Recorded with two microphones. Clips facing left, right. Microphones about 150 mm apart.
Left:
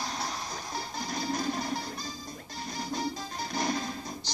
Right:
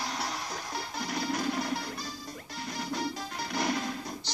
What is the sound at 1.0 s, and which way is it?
Music, 65° right (ahead or behind).